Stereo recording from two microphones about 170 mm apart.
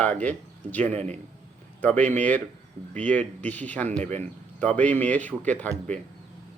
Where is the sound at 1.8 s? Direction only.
10° left (ahead or behind).